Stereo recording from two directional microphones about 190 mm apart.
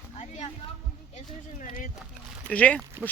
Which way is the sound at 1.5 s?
45° left (ahead or behind).